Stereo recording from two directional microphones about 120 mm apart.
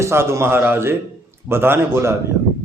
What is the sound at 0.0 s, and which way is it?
A man's voice, 20° right (ahead or behind).